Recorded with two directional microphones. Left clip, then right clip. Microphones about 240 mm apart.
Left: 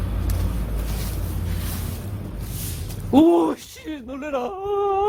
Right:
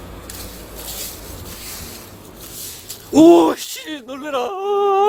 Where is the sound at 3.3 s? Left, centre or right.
Right.